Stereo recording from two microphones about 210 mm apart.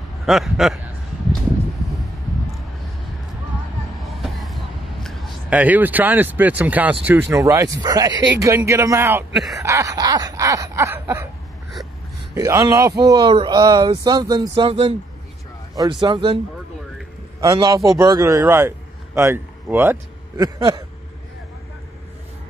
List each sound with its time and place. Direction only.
0.2 s speech: centre (ahead or behind)
4.1 s a sound: centre (ahead or behind)
5.0 s speech: 5° right (ahead or behind)
7.1 s snicker: 10° right (ahead or behind)
9.6 s snicker: 15° right (ahead or behind)
12.4 s snicker: 15° right (ahead or behind)
13.0 s speech: 20° right (ahead or behind)
17.4 s a man's voice: 20° right (ahead or behind)